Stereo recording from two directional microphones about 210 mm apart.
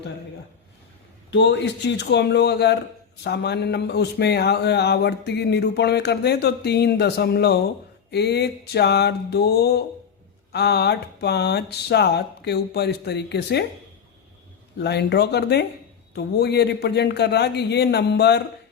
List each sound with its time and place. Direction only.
1.3 s speech: 55° left (ahead or behind)
14.8 s speech: 50° left (ahead or behind)